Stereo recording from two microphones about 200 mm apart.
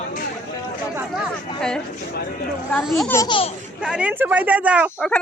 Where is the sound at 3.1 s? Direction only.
15° left (ahead or behind).